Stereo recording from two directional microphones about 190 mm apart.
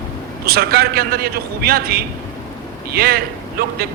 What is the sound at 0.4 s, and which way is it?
Speech, 55° right (ahead or behind).